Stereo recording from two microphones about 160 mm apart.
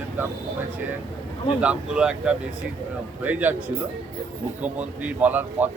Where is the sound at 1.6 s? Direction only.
5° right (ahead or behind).